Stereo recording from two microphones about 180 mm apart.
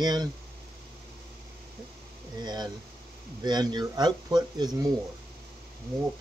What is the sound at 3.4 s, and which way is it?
Speech, 25° right (ahead or behind).